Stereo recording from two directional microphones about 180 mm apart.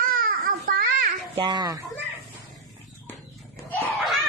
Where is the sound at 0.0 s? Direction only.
50° right (ahead or behind).